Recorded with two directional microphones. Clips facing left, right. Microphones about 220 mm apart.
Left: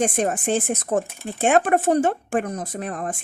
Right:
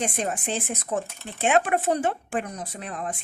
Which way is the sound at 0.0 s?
50° left (ahead or behind).